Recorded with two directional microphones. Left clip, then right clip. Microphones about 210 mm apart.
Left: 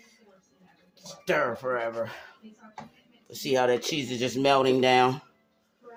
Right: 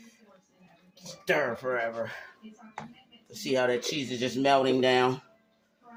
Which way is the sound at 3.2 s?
50° left (ahead or behind).